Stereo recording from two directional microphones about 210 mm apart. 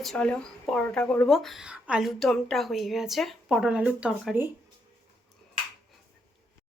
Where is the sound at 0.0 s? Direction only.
5° left (ahead or behind).